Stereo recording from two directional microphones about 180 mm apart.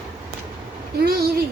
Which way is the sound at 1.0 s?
60° right (ahead or behind).